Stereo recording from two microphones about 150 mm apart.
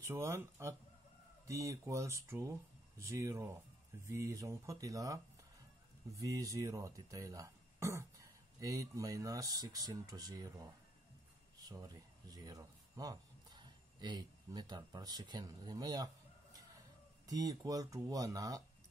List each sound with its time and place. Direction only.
0.0 s speech: 20° right (ahead or behind)
17.3 s speech: 25° right (ahead or behind)